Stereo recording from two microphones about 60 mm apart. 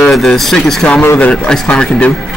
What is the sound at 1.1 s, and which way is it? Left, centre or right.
Speech, left.